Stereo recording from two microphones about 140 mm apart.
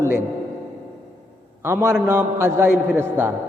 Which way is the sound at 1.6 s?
20° right (ahead or behind).